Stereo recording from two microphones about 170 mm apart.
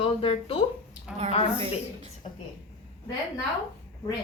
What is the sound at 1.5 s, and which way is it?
Speech, 35° right (ahead or behind).